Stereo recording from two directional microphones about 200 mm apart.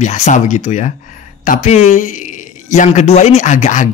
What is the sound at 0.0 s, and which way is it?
Speech, 35° left (ahead or behind).